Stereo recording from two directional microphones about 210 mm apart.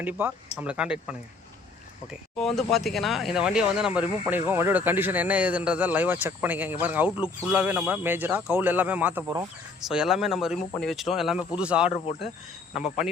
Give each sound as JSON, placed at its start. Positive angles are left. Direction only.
{"t": 0.0, "sound": "speech", "side_deg": -10}
{"t": 2.3, "sound": "speech", "side_deg": 0}
{"t": 9.9, "sound": "speech", "side_deg": -5}